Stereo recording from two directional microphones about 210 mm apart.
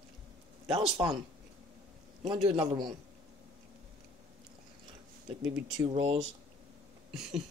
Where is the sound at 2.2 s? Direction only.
25° right (ahead or behind).